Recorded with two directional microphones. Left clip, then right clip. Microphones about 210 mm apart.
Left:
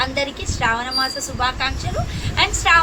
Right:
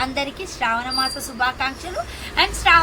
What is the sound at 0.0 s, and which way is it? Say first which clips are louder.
A woman's voice: left 2 dB; 15° left (ahead or behind).